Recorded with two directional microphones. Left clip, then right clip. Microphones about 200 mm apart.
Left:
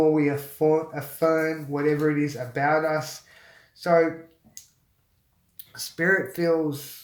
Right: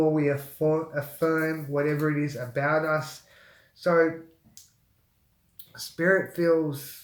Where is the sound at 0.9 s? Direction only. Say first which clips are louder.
Left 3 dB; 20° left (ahead or behind).